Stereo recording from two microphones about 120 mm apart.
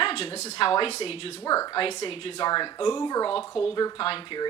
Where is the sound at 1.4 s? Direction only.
30° left (ahead or behind).